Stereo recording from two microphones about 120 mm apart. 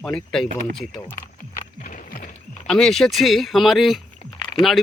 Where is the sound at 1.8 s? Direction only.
90° left.